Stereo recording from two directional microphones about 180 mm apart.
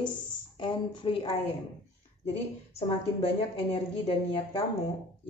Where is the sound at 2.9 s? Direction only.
35° left (ahead or behind).